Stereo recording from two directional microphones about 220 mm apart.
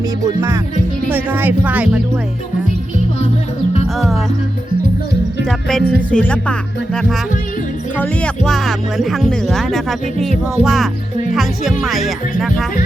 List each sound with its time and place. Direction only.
0.3 s speech: 10° right (ahead or behind)
3.9 s speech: centre (ahead or behind)
5.5 s speech: centre (ahead or behind)